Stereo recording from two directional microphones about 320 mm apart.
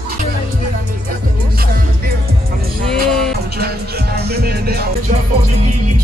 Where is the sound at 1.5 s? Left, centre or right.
Right.